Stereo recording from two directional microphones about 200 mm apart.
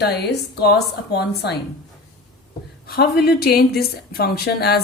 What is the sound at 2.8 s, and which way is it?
A woman's voice, 50° left (ahead or behind).